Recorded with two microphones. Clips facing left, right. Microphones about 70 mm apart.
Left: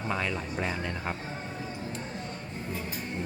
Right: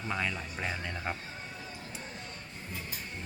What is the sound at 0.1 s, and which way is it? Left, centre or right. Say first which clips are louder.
Speech: left 2 dB; centre.